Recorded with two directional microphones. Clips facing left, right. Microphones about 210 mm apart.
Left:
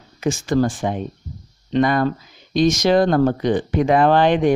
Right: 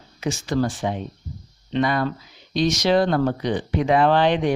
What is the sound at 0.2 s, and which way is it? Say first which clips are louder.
Speech: left 4 dB; 50° left (ahead or behind).